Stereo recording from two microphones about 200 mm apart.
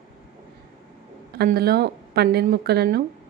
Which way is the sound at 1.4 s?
50° right (ahead or behind).